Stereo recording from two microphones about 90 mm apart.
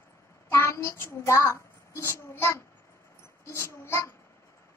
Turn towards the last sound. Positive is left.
turn(degrees=30)  # may be behind; listen again after turning